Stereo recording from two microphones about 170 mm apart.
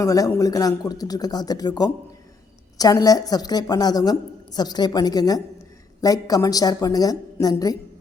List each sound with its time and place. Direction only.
0.0 s a woman's voice: 20° left (ahead or behind)